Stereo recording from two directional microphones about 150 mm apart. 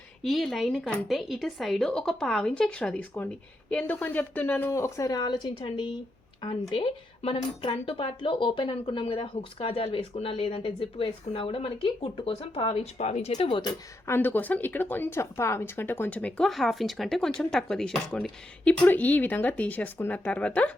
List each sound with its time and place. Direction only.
0.2 s a woman's voice: centre (ahead or behind); by 13.7 s 35° left (ahead or behind)
14.1 s a woman's voice: 15° left (ahead or behind)